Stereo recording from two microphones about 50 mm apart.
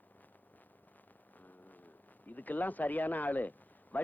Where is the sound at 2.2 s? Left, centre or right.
Left.